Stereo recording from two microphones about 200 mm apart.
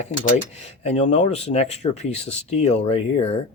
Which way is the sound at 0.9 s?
35° left (ahead or behind).